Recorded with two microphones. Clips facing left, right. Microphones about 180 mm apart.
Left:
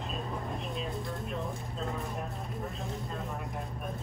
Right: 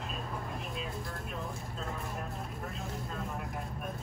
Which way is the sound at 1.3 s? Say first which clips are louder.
Left 3 dB; centre (ahead or behind).